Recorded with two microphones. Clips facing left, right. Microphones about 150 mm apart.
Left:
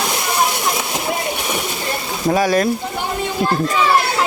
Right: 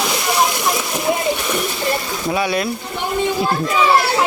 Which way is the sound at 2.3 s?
45° left (ahead or behind).